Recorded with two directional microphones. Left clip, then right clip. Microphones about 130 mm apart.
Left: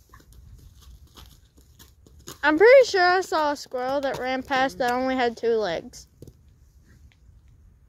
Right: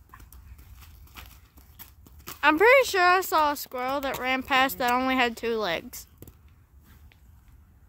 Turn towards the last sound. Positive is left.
turn(degrees=-35)  # may be behind; listen again after turning